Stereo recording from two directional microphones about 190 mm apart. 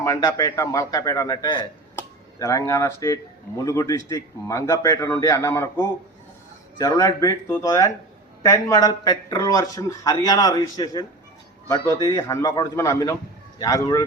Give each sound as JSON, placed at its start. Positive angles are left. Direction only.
{"t": 0.0, "sound": "speech", "side_deg": 20}